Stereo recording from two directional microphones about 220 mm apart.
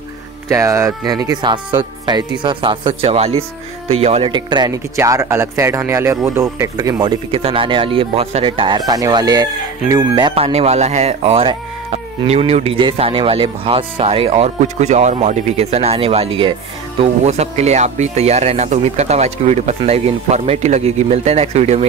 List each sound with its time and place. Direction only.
0.5 s speech: 15° right (ahead or behind); by 21.8 s 30° right (ahead or behind)